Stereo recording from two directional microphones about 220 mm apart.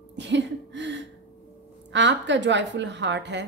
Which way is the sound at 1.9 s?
55° right (ahead or behind).